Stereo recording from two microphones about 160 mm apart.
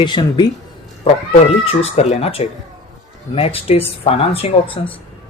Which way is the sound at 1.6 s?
40° left (ahead or behind).